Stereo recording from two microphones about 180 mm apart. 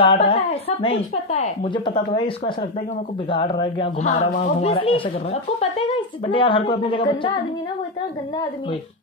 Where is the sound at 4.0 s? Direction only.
40° left (ahead or behind).